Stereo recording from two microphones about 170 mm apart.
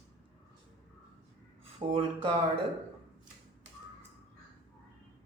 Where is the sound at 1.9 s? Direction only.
35° right (ahead or behind).